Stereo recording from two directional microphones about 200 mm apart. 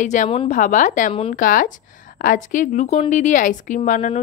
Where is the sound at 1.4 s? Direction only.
40° left (ahead or behind).